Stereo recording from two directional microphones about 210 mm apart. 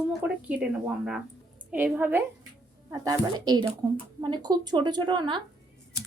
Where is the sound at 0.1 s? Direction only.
5° right (ahead or behind).